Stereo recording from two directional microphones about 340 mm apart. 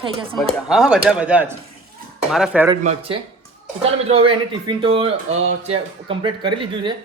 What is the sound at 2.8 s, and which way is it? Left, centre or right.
Speech, centre.